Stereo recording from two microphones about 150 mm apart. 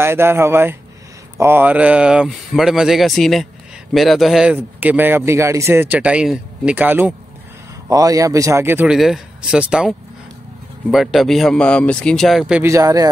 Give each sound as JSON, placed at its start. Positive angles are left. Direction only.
{"t": 0.0, "sound": "speech", "side_deg": -15}
{"t": 7.9, "sound": "a man's voice", "side_deg": -25}
{"t": 8.9, "sound": "speech", "side_deg": 0}
{"t": 12.6, "sound": "a man's voice", "side_deg": -20}